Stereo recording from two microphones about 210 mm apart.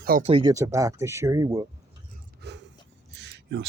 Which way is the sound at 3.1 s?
55° right (ahead or behind).